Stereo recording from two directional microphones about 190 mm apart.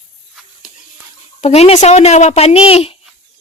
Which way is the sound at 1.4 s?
35° left (ahead or behind).